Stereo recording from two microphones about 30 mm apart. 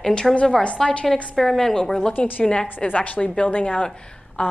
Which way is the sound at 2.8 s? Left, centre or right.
Left.